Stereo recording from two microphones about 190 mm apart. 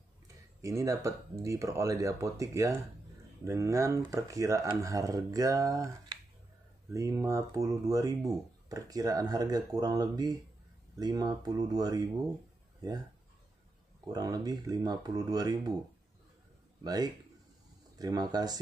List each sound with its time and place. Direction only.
0.6 s speech: 15° right (ahead or behind)
6.9 s speech: 15° right (ahead or behind)
14.1 s speech: 20° right (ahead or behind)
16.8 s speech: 20° right (ahead or behind)